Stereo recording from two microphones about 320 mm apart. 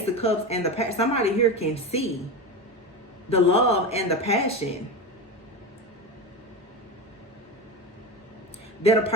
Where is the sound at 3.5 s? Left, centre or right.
Centre.